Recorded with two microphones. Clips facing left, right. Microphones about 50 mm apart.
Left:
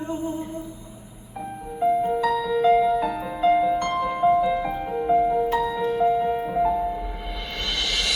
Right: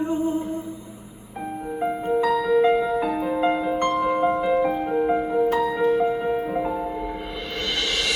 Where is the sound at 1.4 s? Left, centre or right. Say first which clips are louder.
Right 1 dB; right.